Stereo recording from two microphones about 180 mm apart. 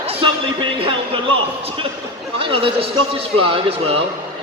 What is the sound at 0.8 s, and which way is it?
Music, 30° right (ahead or behind).